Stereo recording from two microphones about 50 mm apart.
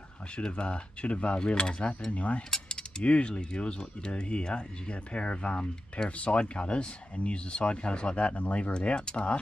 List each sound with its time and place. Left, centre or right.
0.4 s speech: centre